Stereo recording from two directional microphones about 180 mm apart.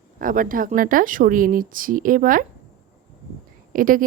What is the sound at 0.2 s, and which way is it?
A woman's voice, 50° right (ahead or behind).